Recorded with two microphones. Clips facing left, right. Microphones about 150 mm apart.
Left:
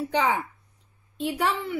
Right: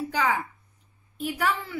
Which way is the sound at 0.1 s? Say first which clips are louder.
Left 2 dB; 25° left (ahead or behind).